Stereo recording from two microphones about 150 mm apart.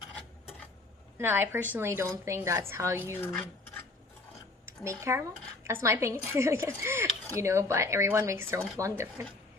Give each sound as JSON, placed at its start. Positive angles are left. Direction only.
{"t": 1.2, "sound": "a woman's voice", "side_deg": -15}
{"t": 4.6, "sound": "a woman's voice", "side_deg": -20}